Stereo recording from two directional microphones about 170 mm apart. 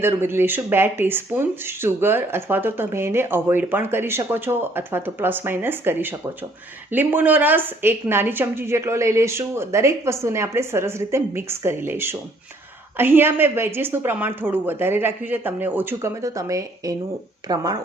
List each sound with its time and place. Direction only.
0.0 s speech: 15° right (ahead or behind)